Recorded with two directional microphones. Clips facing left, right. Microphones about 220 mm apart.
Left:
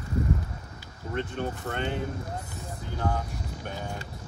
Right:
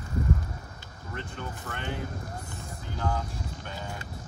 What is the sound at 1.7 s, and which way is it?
Speech, 40° left (ahead or behind).